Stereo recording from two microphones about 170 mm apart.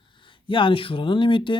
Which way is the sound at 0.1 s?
30° left (ahead or behind).